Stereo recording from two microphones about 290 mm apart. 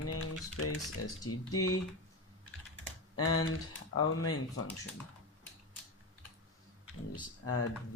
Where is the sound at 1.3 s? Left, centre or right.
Left.